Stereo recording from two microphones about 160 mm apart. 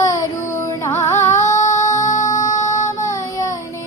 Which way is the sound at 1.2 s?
50° left (ahead or behind).